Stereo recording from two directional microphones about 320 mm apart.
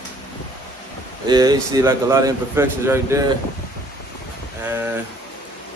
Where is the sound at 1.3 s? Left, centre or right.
Centre.